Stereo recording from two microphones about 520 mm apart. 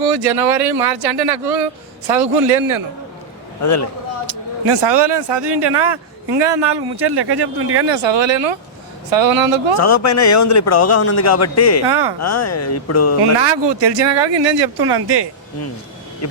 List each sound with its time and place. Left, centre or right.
0.0 s a man's voice: right
3.6 s speech: left
4.3 s speech: right
9.7 s speech: left
11.9 s speech: right
12.2 s speech: left
13.6 s speech: right